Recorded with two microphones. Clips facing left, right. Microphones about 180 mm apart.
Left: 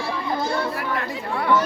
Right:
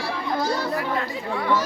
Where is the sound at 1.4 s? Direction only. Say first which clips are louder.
Left 3 dB; 55° left (ahead or behind).